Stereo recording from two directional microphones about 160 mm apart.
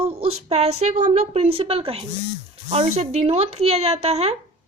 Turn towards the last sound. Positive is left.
turn(degrees=-40)  # may be behind; listen again after turning